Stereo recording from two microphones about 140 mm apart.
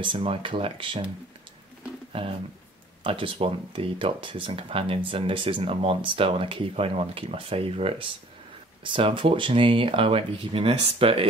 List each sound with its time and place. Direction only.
0.0 s speech: 40° right (ahead or behind)
2.1 s speech: 40° right (ahead or behind)